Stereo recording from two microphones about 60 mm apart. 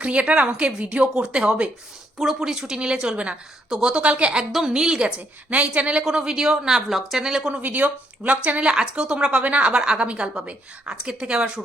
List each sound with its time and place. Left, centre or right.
0.0 s a woman's voice: right
7.6 s a woman's voice: right